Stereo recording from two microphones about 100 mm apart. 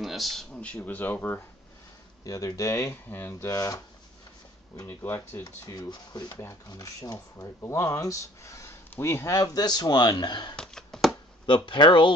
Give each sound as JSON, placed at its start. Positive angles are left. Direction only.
{"t": 0.0, "sound": "a sound", "side_deg": 0}
{"t": 0.7, "sound": "speech", "side_deg": 20}
{"t": 2.2, "sound": "speech", "side_deg": 35}
{"t": 3.1, "sound": "speech", "side_deg": 20}
{"t": 3.4, "sound": "speech", "side_deg": 35}
{"t": 4.8, "sound": "speech", "side_deg": 20}
{"t": 5.4, "sound": "speech", "side_deg": 35}
{"t": 10.5, "sound": "a sound", "side_deg": 5}
{"t": 11.4, "sound": "speech", "side_deg": 50}